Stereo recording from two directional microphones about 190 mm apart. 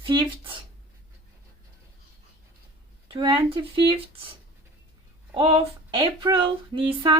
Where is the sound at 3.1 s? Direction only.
25° right (ahead or behind).